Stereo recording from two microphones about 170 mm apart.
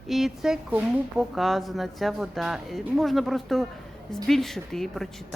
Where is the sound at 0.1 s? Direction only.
Centre (ahead or behind).